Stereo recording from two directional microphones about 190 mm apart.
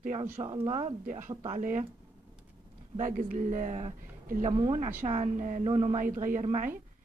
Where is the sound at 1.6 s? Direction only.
45° right (ahead or behind).